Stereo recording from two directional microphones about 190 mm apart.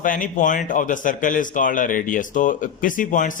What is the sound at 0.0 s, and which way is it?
A man's voice, 45° left (ahead or behind).